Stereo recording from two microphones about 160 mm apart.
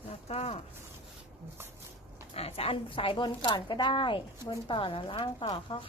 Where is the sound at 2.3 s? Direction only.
40° left (ahead or behind).